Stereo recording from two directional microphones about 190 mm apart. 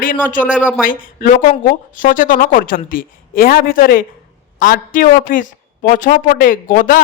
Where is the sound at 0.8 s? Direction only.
45° left (ahead or behind).